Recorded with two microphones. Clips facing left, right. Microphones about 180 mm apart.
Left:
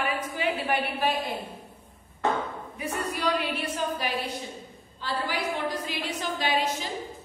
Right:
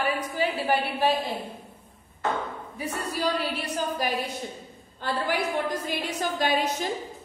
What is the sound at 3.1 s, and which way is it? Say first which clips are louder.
A woman's voice: right 1 dB; 35° right (ahead or behind).